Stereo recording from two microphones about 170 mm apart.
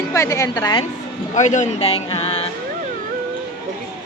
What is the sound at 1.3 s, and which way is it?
Speech, 45° left (ahead or behind).